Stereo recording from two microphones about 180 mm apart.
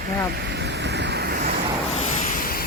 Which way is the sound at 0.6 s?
70° right (ahead or behind).